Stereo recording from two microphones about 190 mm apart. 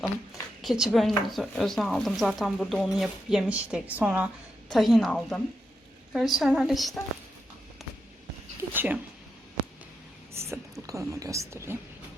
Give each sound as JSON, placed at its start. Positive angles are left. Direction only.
{"t": 0.6, "sound": "speech", "side_deg": 0}
{"t": 8.7, "sound": "speech", "side_deg": -10}
{"t": 10.3, "sound": "speech", "side_deg": -15}